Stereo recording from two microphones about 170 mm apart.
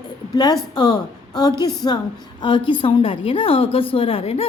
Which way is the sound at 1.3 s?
25° left (ahead or behind).